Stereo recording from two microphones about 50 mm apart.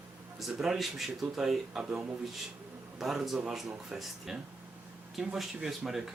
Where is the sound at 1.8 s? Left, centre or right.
Right.